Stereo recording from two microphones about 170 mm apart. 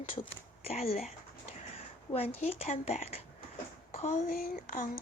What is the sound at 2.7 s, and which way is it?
Speech, 40° left (ahead or behind).